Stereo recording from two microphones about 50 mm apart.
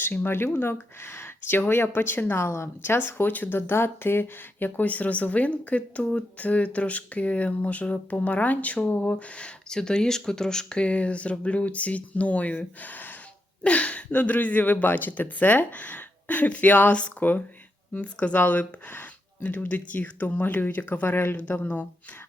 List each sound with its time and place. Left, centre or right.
0.3 s speech: left
2.5 s speech: left
3.2 s speech: left
4.8 s speech: left
9.6 s speech: centre; by 21.3 s left